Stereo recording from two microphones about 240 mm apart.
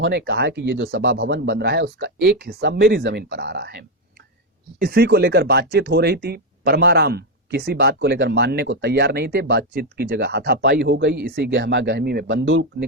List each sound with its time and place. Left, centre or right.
0.0 s speech: right